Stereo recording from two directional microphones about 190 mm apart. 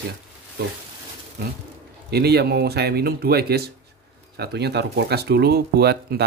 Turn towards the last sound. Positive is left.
turn(degrees=-60)  # may be behind; listen again after turning